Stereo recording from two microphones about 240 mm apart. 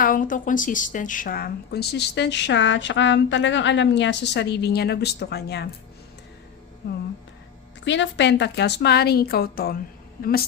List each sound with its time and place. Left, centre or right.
0.0 s a woman's voice: left
6.8 s music: left
7.9 s a woman's voice: left